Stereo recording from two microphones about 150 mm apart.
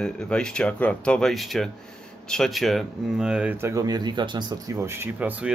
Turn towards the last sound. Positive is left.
turn(degrees=-10)  # may be behind; listen again after turning